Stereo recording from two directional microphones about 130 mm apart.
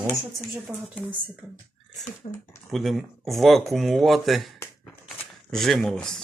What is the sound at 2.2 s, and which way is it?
Speech, 50° left (ahead or behind).